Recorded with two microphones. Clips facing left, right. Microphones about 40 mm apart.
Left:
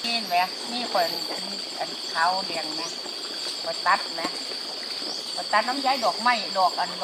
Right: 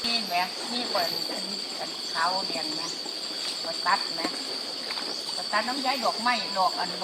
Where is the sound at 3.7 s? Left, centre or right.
Left.